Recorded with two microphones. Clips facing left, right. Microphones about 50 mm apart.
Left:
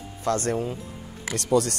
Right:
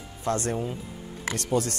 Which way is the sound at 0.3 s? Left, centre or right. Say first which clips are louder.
Left 2 dB; left.